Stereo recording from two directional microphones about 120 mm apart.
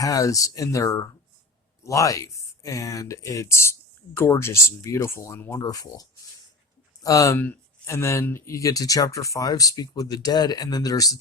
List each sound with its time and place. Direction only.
0.0 s speech: 30° left (ahead or behind)